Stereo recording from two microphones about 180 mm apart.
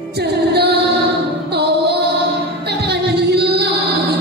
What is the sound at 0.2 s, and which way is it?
Music, 65° right (ahead or behind).